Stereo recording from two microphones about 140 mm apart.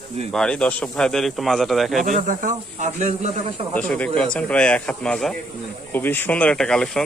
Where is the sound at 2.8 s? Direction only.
55° right (ahead or behind).